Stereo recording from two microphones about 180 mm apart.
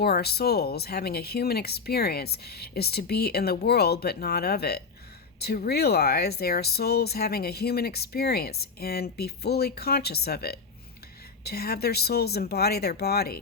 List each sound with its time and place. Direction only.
0.0 s speech: 65° left (ahead or behind)